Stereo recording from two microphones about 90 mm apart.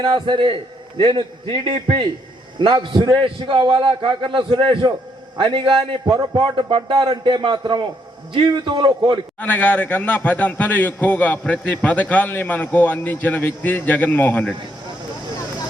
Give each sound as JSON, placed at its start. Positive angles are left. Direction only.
{"t": 0.0, "sound": "a man's voice", "side_deg": -60}
{"t": 6.9, "sound": "a man's voice", "side_deg": -55}
{"t": 9.4, "sound": "a man's voice", "side_deg": 15}